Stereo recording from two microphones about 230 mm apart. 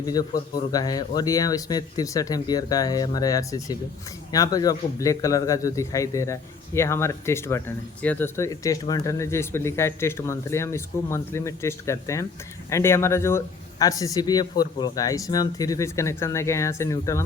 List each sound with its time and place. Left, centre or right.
0.0 s speech: centre